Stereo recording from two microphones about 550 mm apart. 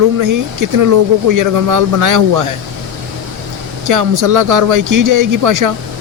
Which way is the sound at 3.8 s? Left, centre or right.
Right.